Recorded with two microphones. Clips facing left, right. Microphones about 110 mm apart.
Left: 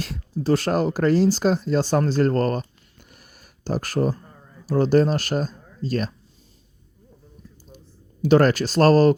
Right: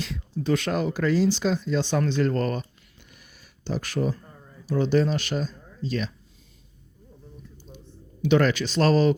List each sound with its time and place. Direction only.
0.0 s a man's voice: 40° left (ahead or behind)
8.2 s a man's voice: 40° left (ahead or behind)